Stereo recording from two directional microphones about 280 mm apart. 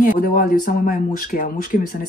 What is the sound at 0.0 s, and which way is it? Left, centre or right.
Speech, left.